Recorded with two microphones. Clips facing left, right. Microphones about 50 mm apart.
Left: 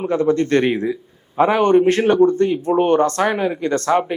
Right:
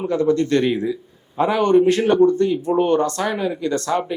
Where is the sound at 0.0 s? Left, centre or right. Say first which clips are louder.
Left 1 dB; left.